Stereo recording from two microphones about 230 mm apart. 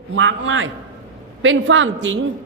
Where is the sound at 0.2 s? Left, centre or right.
Right.